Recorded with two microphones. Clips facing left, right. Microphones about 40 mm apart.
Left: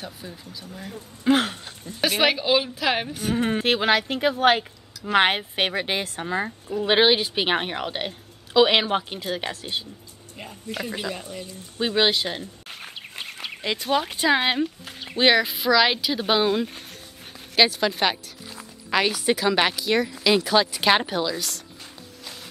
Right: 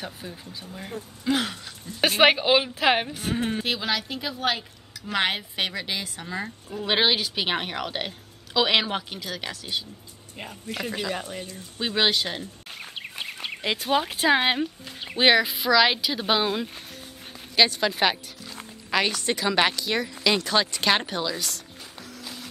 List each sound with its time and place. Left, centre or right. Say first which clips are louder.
0.5 s speech: even; right
1.2 s a sound: left 5 dB; left
2.0 s speech: right 2 dB; right
2.3 s a woman's voice: even; right
3.3 s speech: left 6 dB; left
6.2 s speech: left 6 dB; left
6.8 s speech: left 4 dB; centre
9.1 s speech: left 4 dB; left
11.1 s speech: right 2 dB; right
11.8 s a woman's voice: left 2 dB; centre
13.7 s a woman's voice: left 1 dB; centre